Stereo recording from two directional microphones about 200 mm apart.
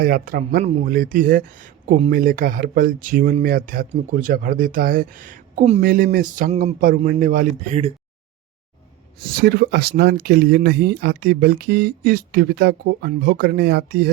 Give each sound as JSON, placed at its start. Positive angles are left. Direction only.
{"t": 0.0, "sound": "speech", "side_deg": -45}
{"t": 5.8, "sound": "speech", "side_deg": -45}
{"t": 9.3, "sound": "speech", "side_deg": -50}